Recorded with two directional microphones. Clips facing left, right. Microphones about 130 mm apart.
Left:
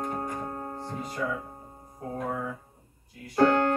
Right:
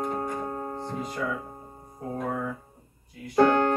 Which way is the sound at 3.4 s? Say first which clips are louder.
Right 2 dB; 20° right (ahead or behind).